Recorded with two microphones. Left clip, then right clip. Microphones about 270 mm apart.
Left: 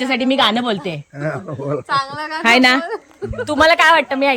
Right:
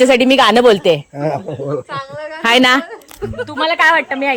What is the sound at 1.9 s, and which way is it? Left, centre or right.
Speech, left.